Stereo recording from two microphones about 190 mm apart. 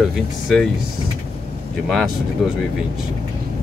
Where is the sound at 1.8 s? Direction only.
Centre (ahead or behind).